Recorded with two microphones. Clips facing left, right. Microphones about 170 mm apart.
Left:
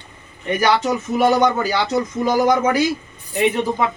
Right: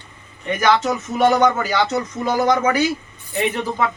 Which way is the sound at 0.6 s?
10° left (ahead or behind).